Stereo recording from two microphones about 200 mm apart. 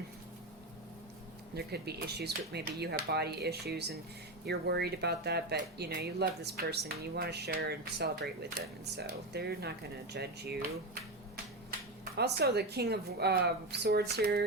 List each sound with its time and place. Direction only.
1.5 s a woman's voice: 55° right (ahead or behind)
12.1 s a woman's voice: 55° right (ahead or behind)